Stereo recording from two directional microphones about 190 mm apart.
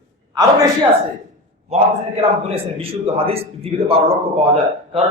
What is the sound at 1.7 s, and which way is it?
A man's voice, 35° right (ahead or behind).